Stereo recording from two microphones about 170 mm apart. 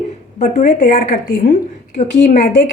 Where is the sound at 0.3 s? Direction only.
45° left (ahead or behind).